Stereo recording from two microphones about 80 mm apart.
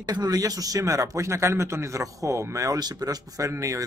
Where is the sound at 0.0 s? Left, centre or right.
Right.